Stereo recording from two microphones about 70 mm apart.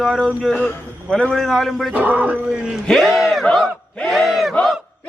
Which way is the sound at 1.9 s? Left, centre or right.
Right.